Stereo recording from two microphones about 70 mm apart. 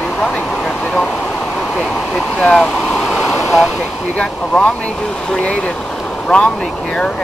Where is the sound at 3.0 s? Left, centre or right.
Centre.